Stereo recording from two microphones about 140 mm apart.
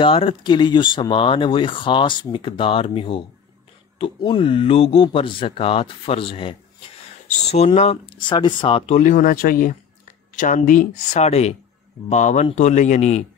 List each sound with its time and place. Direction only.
0.0 s speech: 40° left (ahead or behind)
7.2 s speech: 50° left (ahead or behind)
8.2 s speech: 35° left (ahead or behind); by 9.8 s 85° left
10.3 s speech: 70° left (ahead or behind)
11.1 s speech: 50° left (ahead or behind)